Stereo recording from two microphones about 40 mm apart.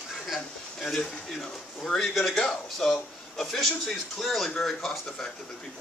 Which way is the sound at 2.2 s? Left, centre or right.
Centre.